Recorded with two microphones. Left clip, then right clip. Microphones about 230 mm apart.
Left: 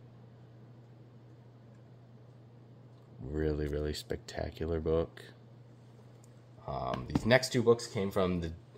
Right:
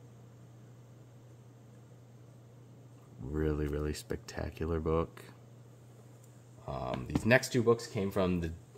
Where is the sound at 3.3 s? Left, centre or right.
Centre.